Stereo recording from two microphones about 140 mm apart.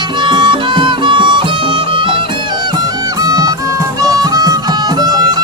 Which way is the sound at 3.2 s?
25° right (ahead or behind).